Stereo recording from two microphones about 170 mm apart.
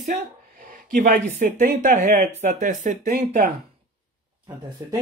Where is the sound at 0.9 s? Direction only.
50° right (ahead or behind).